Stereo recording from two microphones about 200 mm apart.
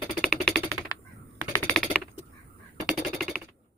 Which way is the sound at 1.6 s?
Centre (ahead or behind).